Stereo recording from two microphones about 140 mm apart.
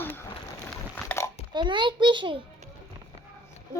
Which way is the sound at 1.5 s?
35° right (ahead or behind).